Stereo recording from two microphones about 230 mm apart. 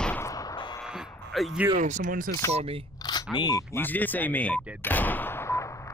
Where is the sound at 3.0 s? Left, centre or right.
Centre.